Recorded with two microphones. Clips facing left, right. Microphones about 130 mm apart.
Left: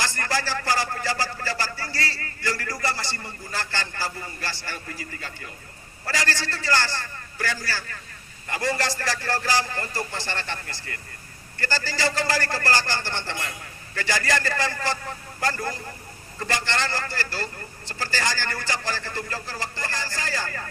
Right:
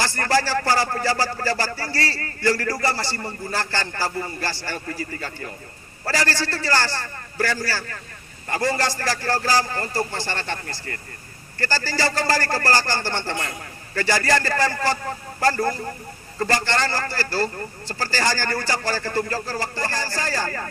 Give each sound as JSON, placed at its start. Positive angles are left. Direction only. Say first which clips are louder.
{"t": 0.0, "sound": "a man's voice", "louder": "right 6 dB", "side_deg": -35}
{"t": 1.8, "sound": "a man's voice", "louder": "right 4 dB", "side_deg": -60}
{"t": 2.8, "sound": "a man's voice", "louder": "right 5 dB", "side_deg": -35}